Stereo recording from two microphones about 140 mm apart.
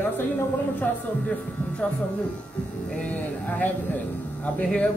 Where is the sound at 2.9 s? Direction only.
10° left (ahead or behind).